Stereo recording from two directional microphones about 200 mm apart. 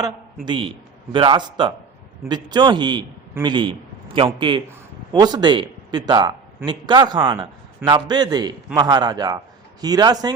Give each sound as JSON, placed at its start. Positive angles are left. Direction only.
{"t": 0.4, "sound": "a man's voice", "side_deg": -25}